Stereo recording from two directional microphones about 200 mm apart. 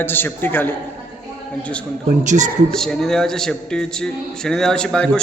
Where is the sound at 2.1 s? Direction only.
35° right (ahead or behind).